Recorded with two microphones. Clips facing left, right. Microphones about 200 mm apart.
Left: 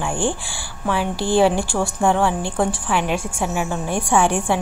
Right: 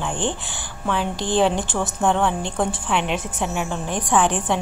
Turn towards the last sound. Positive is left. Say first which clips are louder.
# left 2 dB
turn(degrees=10)  # may be behind; listen again after turning